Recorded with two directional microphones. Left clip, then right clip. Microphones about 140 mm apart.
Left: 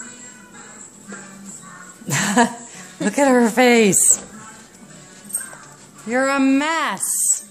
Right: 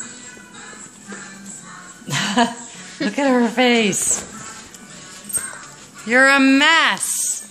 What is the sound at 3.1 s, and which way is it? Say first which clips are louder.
Speech: left 3 dB; 75° left (ahead or behind).